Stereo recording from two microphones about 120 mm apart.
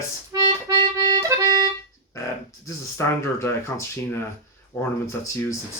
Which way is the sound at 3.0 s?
25° left (ahead or behind).